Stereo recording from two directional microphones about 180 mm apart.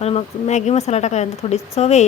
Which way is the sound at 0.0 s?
35° left (ahead or behind).